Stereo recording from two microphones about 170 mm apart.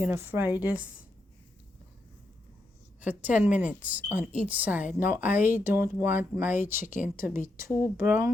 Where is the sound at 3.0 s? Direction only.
10° right (ahead or behind).